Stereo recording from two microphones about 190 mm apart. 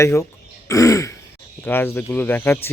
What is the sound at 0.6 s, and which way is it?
Throat clearing, 15° left (ahead or behind).